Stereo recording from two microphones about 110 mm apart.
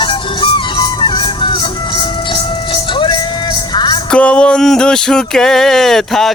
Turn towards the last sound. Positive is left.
turn(degrees=5)  # may be behind; listen again after turning